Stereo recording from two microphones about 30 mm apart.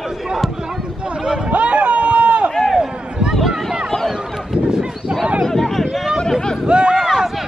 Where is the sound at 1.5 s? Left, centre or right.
Right.